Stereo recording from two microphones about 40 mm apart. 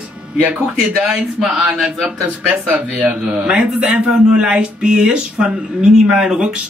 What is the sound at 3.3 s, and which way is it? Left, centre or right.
Speech, right.